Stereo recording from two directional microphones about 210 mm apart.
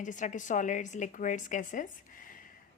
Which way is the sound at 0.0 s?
35° left (ahead or behind).